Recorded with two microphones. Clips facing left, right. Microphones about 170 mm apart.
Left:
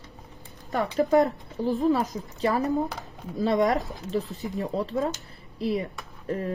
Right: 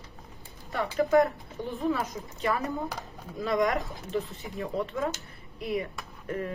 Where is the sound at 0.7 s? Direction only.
35° left (ahead or behind).